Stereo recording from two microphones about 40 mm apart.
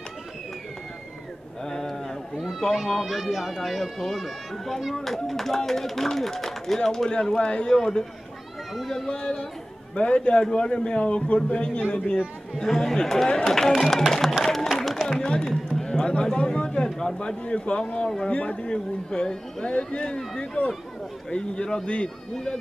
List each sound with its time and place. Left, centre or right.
1.6 s a sound: centre
2.9 s speech: centre
7.1 s speech: left
7.7 s speech: centre
9.2 s a man's voice: left
12.5 s speech: centre
14.4 s a sound: centre
15.0 s speech: left
15.8 s a sound: left
16.6 s a man's voice: centre
21.4 s speech: centre